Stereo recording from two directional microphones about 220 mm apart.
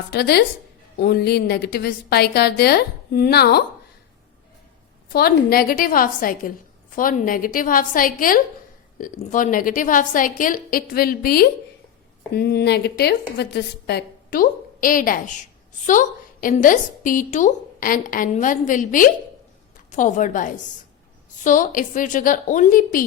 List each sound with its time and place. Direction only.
0.1 s a woman's voice: 45° left (ahead or behind)
5.1 s a woman's voice: 45° left (ahead or behind)